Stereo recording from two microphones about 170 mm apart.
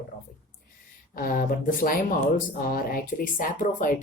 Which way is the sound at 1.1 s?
55° left (ahead or behind).